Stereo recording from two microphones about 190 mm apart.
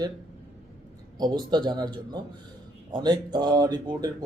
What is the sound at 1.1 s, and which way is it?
Speech, 20° right (ahead or behind).